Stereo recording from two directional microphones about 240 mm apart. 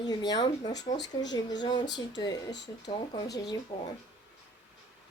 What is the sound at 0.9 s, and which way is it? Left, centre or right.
Speech, left.